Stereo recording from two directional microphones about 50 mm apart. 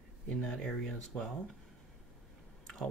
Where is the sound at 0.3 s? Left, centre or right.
Centre.